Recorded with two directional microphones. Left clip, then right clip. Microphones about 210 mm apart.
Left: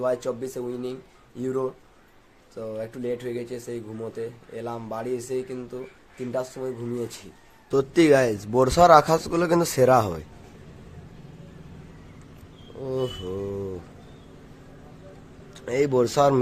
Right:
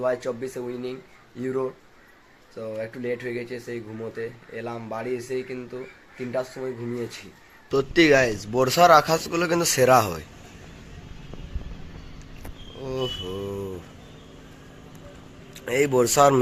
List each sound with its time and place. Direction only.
0.0 s speech: 10° left (ahead or behind)
7.7 s speech: 15° left (ahead or behind)
12.8 s speech: 15° left (ahead or behind)
13.2 s speech: centre (ahead or behind)
15.5 s speech: 10° left (ahead or behind)